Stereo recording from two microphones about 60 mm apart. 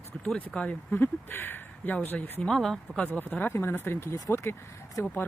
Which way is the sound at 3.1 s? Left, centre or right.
Left.